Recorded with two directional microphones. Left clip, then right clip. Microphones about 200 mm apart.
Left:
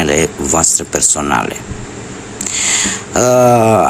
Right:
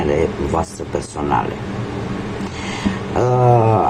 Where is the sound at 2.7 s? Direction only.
50° left (ahead or behind).